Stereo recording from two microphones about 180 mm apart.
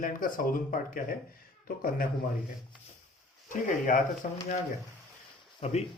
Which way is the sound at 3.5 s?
45° left (ahead or behind).